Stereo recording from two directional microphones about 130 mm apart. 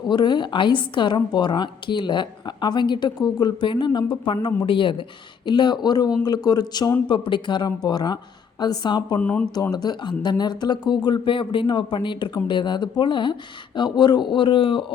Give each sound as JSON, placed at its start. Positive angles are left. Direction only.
{"t": 0.1, "sound": "a woman's voice", "side_deg": 35}
{"t": 9.1, "sound": "speech", "side_deg": 10}
{"t": 9.7, "sound": "a woman's voice", "side_deg": 35}